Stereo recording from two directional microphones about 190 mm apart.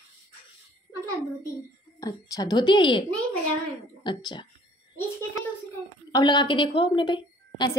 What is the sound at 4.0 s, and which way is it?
Speech, 25° left (ahead or behind).